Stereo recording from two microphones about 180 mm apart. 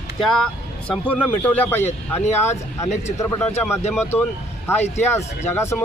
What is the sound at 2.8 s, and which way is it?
Speech, 40° left (ahead or behind).